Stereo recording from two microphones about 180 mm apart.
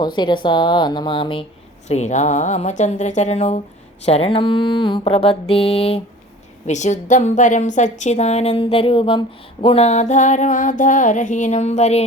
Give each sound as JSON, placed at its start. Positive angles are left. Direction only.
{"t": 0.2, "sound": "a woman's voice", "side_deg": 25}
{"t": 1.9, "sound": "a woman's voice", "side_deg": 40}